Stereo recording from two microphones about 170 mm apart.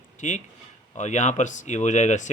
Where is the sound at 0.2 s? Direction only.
45° left (ahead or behind).